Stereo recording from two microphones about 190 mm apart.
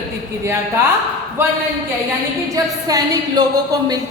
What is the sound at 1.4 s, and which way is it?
Speech, 10° right (ahead or behind).